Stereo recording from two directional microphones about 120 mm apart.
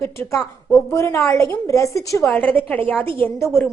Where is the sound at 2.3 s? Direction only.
15° left (ahead or behind).